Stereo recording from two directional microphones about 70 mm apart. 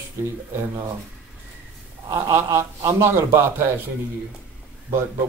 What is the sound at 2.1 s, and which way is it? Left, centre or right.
A man's voice, right.